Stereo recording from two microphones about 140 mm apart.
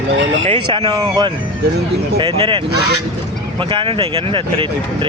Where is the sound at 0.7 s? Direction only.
40° right (ahead or behind).